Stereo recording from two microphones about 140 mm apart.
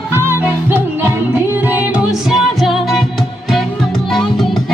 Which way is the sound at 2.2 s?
Centre (ahead or behind).